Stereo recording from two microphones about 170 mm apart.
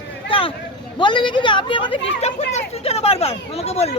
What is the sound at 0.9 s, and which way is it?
Speech, 25° left (ahead or behind).